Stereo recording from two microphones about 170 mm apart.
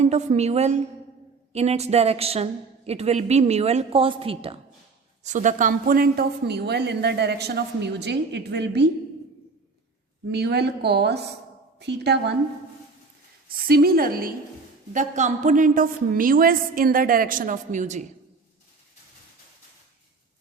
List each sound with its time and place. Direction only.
0.0 s a woman's voice: 40° right (ahead or behind)
5.2 s a woman's voice: 45° right (ahead or behind); by 8.9 s 85° right
10.3 s a woman's voice: 75° right (ahead or behind)
13.7 s a woman's voice: 60° right (ahead or behind)
14.9 s a woman's voice: 45° right (ahead or behind)